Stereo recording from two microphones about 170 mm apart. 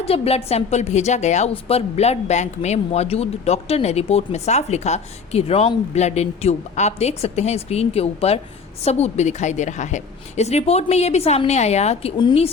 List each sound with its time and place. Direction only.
0.0 s a woman's voice: 35° left (ahead or behind)
12.1 s speech: 30° left (ahead or behind)